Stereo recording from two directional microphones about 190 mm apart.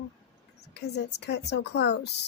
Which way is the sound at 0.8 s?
60° left (ahead or behind).